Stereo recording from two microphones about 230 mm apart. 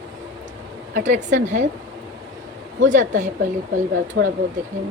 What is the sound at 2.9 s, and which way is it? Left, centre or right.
Speech, right.